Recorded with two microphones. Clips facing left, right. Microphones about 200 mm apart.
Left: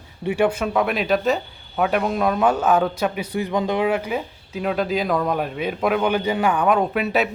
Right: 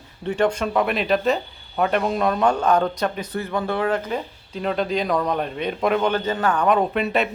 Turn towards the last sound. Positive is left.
turn(degrees=0)  # may be behind; listen again after turning